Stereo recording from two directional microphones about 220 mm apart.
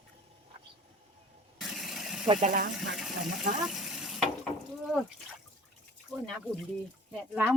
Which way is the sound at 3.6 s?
Centre (ahead or behind).